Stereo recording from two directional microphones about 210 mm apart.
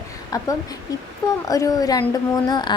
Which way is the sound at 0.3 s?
15° left (ahead or behind).